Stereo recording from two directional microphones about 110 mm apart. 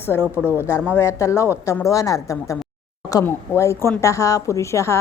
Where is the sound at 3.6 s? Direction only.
25° left (ahead or behind).